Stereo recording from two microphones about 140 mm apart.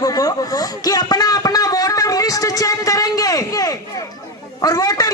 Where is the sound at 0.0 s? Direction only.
25° left (ahead or behind).